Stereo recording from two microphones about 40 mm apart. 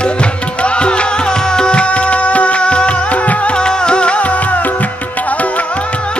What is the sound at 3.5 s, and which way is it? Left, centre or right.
Music, left.